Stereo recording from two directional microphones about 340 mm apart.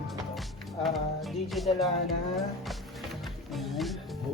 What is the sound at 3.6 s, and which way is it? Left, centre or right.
Music, centre.